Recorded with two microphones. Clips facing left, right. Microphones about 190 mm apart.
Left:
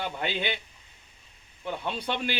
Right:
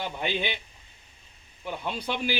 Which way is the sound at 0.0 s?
15° right (ahead or behind).